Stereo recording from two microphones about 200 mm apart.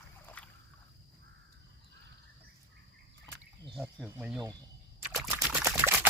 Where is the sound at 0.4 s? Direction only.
5° left (ahead or behind).